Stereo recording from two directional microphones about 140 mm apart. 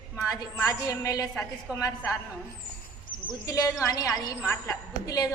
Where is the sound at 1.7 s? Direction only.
20° left (ahead or behind).